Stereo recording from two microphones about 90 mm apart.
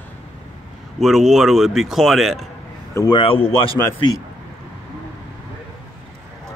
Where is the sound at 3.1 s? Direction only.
80° left.